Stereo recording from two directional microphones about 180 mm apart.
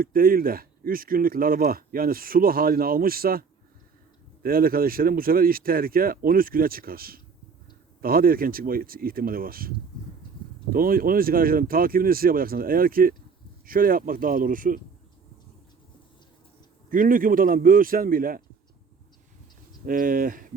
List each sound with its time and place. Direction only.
0.0 s speech: 55° right (ahead or behind)
4.4 s speech: 55° right (ahead or behind)
16.9 s speech: 50° right (ahead or behind)
19.8 s speech: 50° right (ahead or behind)